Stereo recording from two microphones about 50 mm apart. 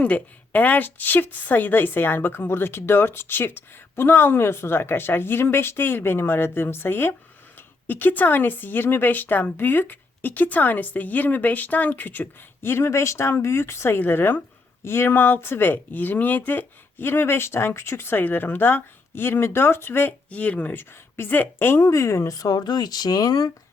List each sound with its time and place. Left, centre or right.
0.0 s speech: left
7.9 s speech: left
12.6 s speech: left
14.1 s speech: left
20.3 s speech: left
20.7 s speech: left
21.7 s speech: left
21.9 s speech: left